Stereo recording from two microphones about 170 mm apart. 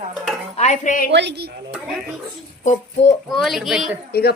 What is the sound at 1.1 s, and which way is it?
Speech, 90° right.